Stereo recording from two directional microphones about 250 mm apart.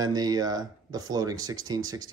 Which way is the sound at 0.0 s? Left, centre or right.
Centre.